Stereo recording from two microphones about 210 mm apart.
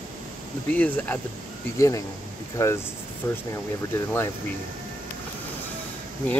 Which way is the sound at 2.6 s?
15° left (ahead or behind).